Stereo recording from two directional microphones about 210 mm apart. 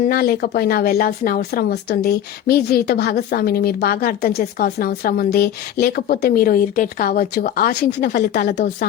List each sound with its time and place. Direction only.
0.0 s speech: 45° left (ahead or behind)
8.1 s speech: 50° left (ahead or behind)